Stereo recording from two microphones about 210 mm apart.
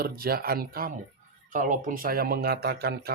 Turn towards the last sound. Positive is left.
turn(degrees=-50)  # may be behind; listen again after turning